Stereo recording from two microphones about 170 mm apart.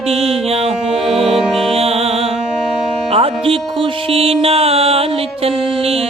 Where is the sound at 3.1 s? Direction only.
35° right (ahead or behind).